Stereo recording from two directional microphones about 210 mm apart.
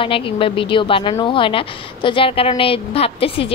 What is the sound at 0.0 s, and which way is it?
A woman's voice, 25° left (ahead or behind).